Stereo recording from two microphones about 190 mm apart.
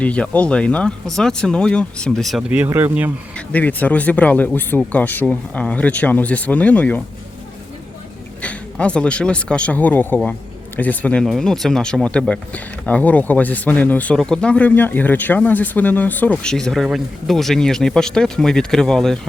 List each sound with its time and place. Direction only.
0.0 s speech: 5° left (ahead or behind); by 3.1 s 10° right (ahead or behind)
3.3 s speech: 10° left (ahead or behind)
8.4 s speech: 5° left (ahead or behind)